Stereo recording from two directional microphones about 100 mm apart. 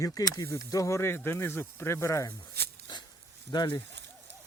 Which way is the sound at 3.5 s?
45° left (ahead or behind).